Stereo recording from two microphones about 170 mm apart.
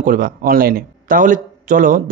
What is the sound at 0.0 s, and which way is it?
A man's voice, 55° right (ahead or behind).